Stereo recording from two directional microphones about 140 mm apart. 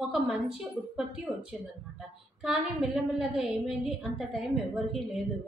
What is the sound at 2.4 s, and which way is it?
A woman's voice, centre (ahead or behind).